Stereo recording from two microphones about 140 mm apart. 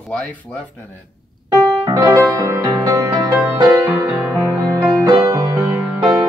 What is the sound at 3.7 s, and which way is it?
Music, 15° right (ahead or behind).